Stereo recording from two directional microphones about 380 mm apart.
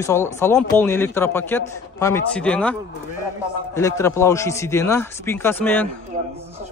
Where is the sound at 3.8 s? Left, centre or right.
Centre.